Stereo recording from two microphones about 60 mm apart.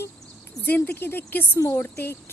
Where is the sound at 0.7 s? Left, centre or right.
Left.